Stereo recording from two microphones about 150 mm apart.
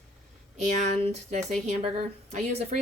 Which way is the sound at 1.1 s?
50° right (ahead or behind).